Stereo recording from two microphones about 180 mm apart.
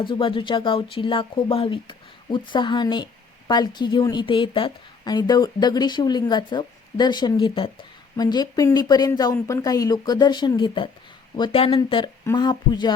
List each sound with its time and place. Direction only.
0.0 s speech: 30° left (ahead or behind)